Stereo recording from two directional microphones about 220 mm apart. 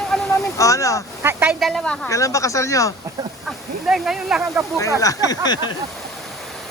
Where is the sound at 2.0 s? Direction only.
15° left (ahead or behind).